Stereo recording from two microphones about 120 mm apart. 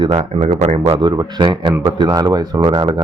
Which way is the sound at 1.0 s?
35° right (ahead or behind).